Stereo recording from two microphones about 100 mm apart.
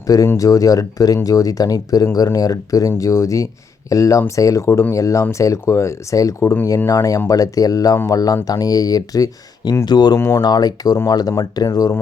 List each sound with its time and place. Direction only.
0.3 s speech: 35° left (ahead or behind)
10.2 s speech: 25° left (ahead or behind)
10.4 s speech: 40° left (ahead or behind)